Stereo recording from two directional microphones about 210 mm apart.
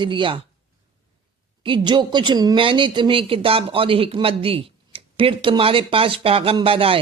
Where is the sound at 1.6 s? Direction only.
20° right (ahead or behind).